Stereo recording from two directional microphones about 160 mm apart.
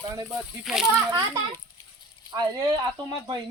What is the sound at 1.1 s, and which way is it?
Speech, 25° right (ahead or behind).